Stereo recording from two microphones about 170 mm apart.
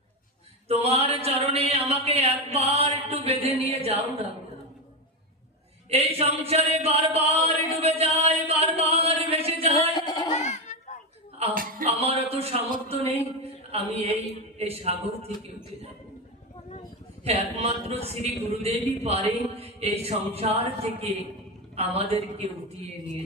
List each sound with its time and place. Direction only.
0.7 s a man's voice: 35° right (ahead or behind)
5.9 s a sound: 35° right (ahead or behind)
9.9 s female singing: 25° left (ahead or behind)
10.3 s a sound: 45° left (ahead or behind)
11.5 s speech: 55° right (ahead or behind)
11.9 s a man's voice: 35° right (ahead or behind)
17.2 s a man's voice: 35° right (ahead or behind)